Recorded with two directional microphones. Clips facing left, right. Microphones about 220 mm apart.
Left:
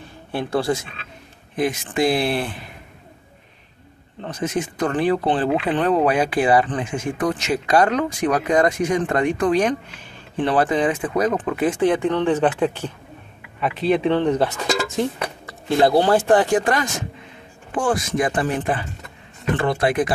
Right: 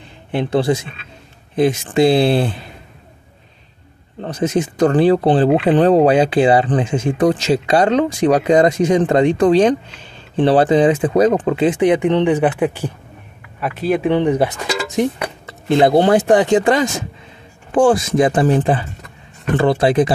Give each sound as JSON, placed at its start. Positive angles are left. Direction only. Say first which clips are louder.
{"t": 0.3, "sound": "speech", "louder": "right 5 dB", "side_deg": -20}
{"t": 4.2, "sound": "speech", "louder": "right 6 dB", "side_deg": -35}